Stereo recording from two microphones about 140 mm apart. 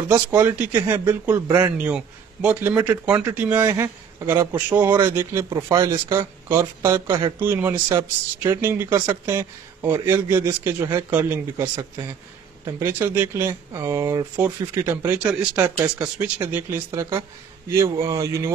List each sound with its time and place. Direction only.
0.1 s speech: 15° right (ahead or behind)
1.8 s speech: 10° right (ahead or behind)
7.1 s a man's voice: 35° right (ahead or behind)
7.3 s speech: 15° right (ahead or behind)
12.7 s speech: 15° right (ahead or behind)